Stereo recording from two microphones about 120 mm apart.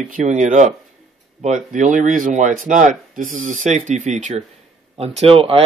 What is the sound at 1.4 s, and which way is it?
Speech, 90° right.